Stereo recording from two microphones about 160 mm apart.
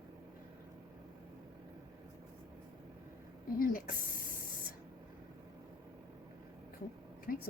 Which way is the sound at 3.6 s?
65° left (ahead or behind).